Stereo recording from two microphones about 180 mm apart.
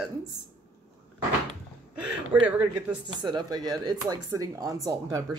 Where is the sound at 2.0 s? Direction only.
5° right (ahead or behind).